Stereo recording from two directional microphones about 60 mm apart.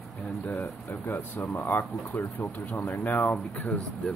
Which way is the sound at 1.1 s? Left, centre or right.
Left.